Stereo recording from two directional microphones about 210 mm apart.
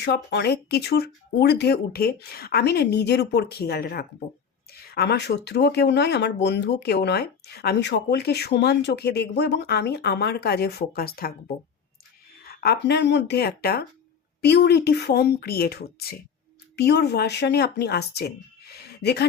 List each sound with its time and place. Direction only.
0.0 s speech: 55° left (ahead or behind)